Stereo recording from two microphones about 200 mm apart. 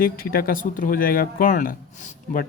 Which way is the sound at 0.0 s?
45° left (ahead or behind).